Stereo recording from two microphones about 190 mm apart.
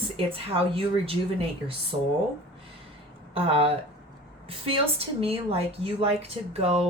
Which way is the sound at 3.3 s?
30° right (ahead or behind).